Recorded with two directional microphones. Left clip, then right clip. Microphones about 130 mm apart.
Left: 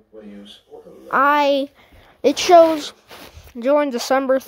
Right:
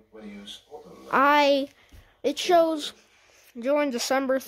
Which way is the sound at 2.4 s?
35° left (ahead or behind).